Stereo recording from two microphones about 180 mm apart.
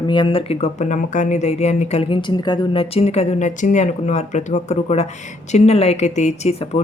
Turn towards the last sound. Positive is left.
turn(degrees=35)  # may be behind; listen again after turning